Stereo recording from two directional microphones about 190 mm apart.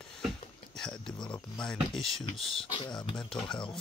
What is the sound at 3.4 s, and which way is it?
Speech, 25° left (ahead or behind).